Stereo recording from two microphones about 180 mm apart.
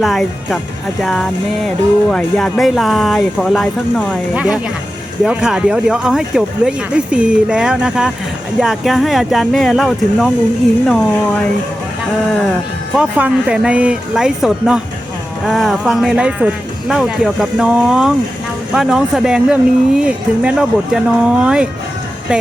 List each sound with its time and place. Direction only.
0.0 s speech: centre (ahead or behind)
4.4 s speech: 5° right (ahead or behind)
12.3 s speech: centre (ahead or behind)